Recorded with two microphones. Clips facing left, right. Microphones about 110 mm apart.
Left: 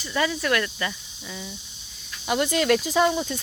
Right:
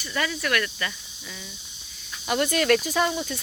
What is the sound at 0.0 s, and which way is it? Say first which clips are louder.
Speech: left 3 dB; 20° left (ahead or behind).